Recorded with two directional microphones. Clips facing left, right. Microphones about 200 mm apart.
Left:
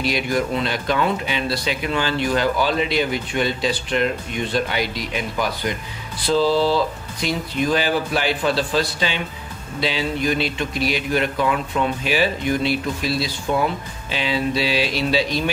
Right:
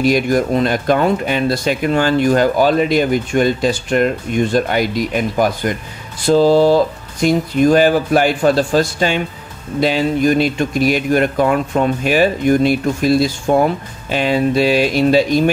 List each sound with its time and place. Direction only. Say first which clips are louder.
0.0 s speech: right 7 dB; 45° right (ahead or behind)